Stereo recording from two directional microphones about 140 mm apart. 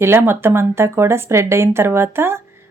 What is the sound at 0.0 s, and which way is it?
A woman's voice, 15° right (ahead or behind).